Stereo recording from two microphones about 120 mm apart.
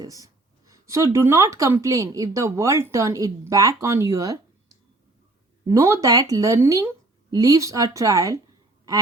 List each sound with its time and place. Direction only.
0.0 s speech: 30° right (ahead or behind)
5.6 s speech: 25° right (ahead or behind)